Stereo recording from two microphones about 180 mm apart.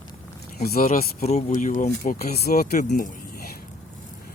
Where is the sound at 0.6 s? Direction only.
55° left (ahead or behind).